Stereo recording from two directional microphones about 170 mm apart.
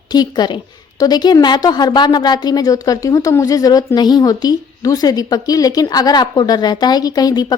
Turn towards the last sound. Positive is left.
turn(degrees=25)  # may be behind; listen again after turning